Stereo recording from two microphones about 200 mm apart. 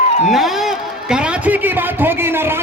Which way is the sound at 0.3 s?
Centre (ahead or behind).